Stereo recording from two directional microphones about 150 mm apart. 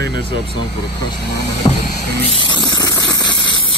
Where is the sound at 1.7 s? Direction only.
30° left (ahead or behind).